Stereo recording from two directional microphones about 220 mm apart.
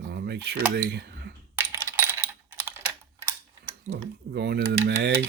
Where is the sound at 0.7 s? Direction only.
50° right (ahead or behind).